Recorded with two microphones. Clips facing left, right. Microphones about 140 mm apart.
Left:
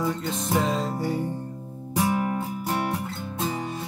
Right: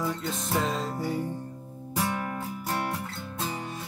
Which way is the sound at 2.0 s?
15° left (ahead or behind).